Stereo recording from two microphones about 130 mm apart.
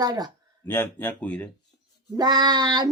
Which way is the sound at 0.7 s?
15° left (ahead or behind).